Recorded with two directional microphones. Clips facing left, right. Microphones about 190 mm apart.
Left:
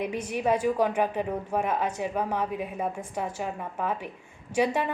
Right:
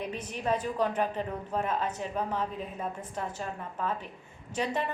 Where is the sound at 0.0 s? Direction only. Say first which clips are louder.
Left 6 dB; 10° left (ahead or behind).